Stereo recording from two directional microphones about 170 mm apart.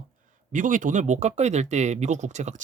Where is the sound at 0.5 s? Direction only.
50° right (ahead or behind).